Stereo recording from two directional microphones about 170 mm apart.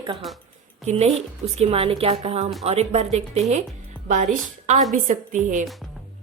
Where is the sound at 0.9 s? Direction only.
40° right (ahead or behind).